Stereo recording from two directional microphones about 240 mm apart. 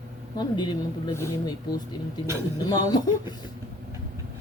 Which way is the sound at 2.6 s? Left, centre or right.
Centre.